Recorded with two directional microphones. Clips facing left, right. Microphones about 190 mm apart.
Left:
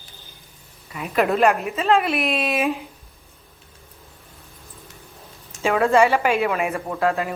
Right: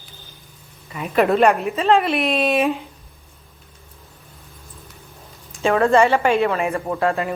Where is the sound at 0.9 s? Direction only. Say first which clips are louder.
Right 3 dB; centre (ahead or behind).